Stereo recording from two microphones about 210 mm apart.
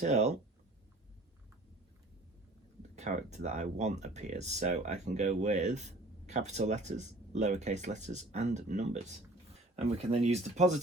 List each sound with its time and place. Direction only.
0.0 s speech: 35° right (ahead or behind)
2.9 s speech: 35° right (ahead or behind)